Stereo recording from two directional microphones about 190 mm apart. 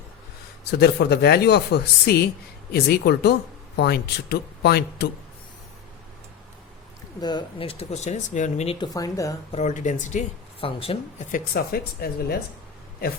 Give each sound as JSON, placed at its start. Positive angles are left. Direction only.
{"t": 0.7, "sound": "speech", "side_deg": 60}
{"t": 7.2, "sound": "speech", "side_deg": 25}
{"t": 9.5, "sound": "speech", "side_deg": 40}
{"t": 11.3, "sound": "speech", "side_deg": 50}